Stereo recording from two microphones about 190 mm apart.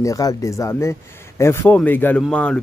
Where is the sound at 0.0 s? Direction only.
15° left (ahead or behind).